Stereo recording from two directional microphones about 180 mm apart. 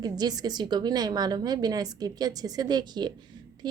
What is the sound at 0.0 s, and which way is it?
A woman's voice, 20° right (ahead or behind).